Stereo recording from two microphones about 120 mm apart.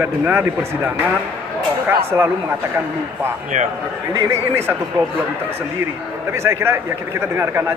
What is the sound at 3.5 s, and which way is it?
Speech, 90° right.